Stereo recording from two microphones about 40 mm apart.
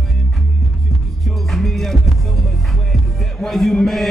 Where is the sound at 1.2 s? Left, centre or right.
Centre.